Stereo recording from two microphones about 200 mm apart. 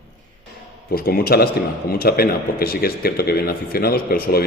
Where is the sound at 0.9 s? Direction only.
50° left (ahead or behind).